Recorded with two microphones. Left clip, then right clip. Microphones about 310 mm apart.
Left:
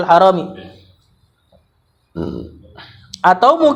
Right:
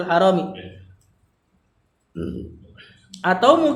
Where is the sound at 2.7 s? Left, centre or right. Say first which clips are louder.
Left 8 dB; centre.